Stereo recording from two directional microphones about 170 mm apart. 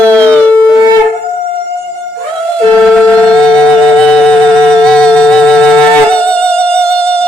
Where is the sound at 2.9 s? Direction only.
5° left (ahead or behind).